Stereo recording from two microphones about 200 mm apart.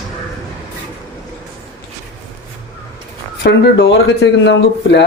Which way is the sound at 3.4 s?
55° left (ahead or behind).